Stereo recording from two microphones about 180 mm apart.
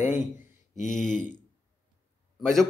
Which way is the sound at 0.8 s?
45° left (ahead or behind).